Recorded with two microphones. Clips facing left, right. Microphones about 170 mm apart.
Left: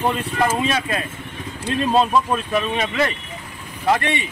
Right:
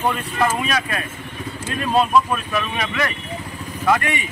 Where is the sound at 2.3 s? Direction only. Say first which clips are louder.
Left 3 dB; 25° left (ahead or behind).